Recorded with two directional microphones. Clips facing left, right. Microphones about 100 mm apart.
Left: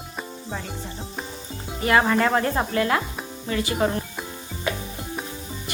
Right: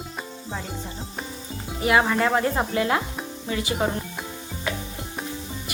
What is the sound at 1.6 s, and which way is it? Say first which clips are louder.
Speech: left 1 dB; 5° right (ahead or behind).